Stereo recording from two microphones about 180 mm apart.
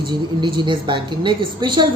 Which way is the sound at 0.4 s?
25° right (ahead or behind).